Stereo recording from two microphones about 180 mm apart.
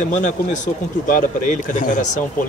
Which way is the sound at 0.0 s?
45° left (ahead or behind).